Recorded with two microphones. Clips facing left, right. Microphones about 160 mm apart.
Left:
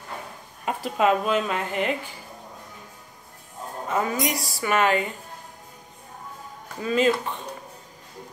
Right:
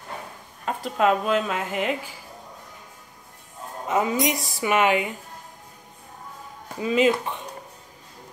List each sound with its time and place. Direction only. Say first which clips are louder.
0.7 s speech: even; 5° left (ahead or behind)
3.9 s speech: right 3 dB; 20° right (ahead or behind)
6.8 s speech: right 1 dB; 15° right (ahead or behind)